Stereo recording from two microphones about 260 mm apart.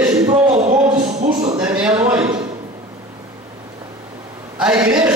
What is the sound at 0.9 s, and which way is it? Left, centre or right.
Music, right.